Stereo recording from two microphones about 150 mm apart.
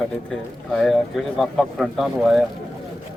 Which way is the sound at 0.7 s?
Centre (ahead or behind).